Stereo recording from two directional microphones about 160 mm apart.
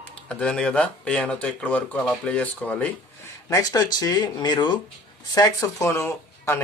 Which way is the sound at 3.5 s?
20° left (ahead or behind).